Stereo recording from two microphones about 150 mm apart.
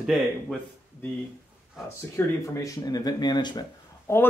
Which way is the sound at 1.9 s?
20° left (ahead or behind).